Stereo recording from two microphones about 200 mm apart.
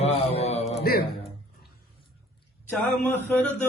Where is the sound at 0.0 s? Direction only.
30° left (ahead or behind).